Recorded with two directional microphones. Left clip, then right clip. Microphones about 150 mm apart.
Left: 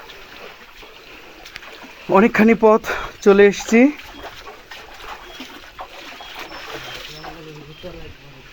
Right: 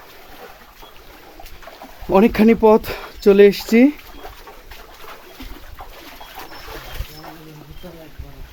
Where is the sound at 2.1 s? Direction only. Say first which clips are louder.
Even; 20° right (ahead or behind).